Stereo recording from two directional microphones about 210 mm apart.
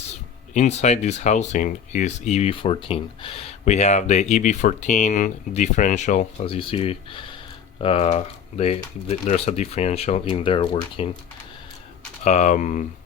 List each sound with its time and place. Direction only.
0.5 s speech: 35° left (ahead or behind)
12.2 s speech: 35° left (ahead or behind)